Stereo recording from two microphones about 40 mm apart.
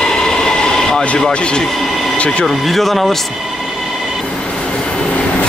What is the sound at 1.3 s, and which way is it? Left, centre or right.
Speech, left.